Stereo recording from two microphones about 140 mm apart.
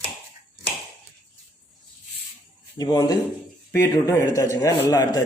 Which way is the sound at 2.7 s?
25° left (ahead or behind).